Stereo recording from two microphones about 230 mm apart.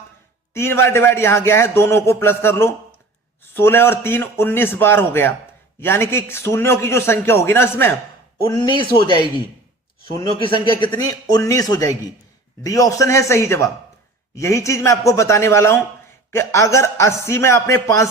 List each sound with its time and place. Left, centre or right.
0.5 s a man's voice: centre